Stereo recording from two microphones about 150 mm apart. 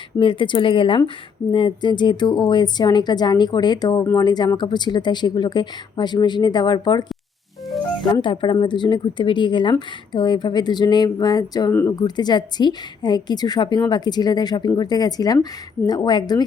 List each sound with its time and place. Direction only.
0.2 s a woman's voice: 35° left (ahead or behind)
8.2 s speech: 35° left (ahead or behind)
11.7 s speech: 15° left (ahead or behind)
11.9 s a woman's voice: 30° left (ahead or behind)